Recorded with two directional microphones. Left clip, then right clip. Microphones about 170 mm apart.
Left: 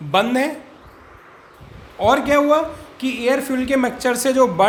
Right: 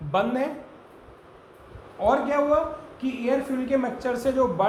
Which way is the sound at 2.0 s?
50° left (ahead or behind).